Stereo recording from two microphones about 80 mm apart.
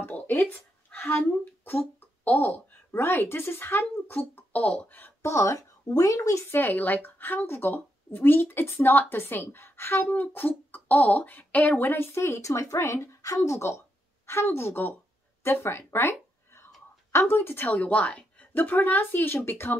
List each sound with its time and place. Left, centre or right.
0.0 s speech: left
6.6 s speech: left